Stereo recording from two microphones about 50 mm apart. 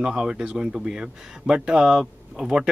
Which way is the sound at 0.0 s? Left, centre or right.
Centre.